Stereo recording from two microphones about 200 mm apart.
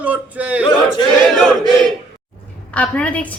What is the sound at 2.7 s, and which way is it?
Speech, 5° left (ahead or behind).